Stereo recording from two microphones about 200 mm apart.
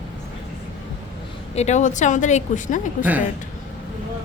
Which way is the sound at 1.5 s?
35° left (ahead or behind).